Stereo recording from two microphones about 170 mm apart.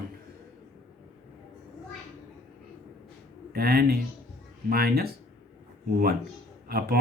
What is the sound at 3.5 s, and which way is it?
Speech, 60° right (ahead or behind).